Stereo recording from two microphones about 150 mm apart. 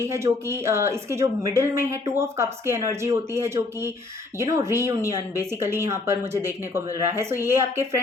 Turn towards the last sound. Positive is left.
turn(degrees=-15)  # may be behind; listen again after turning